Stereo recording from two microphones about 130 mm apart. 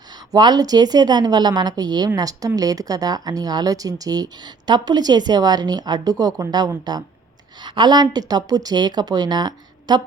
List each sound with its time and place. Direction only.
0.3 s speech: 35° right (ahead or behind)